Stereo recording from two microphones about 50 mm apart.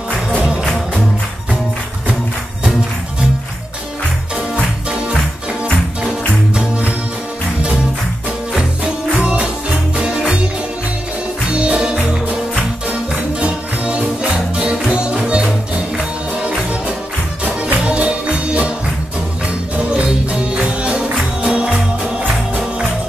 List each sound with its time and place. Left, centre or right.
0.4 s music: centre
6.5 s music: centre
8.5 s music: right
11.5 s music: right